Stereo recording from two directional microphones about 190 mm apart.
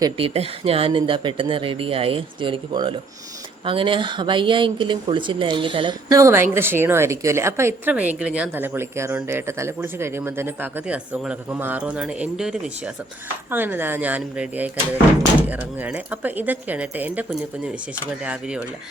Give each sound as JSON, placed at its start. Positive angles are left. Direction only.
{"t": 0.0, "sound": "speech", "side_deg": -25}